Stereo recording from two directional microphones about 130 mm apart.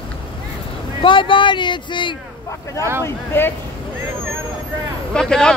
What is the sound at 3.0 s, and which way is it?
Speech, 15° left (ahead or behind).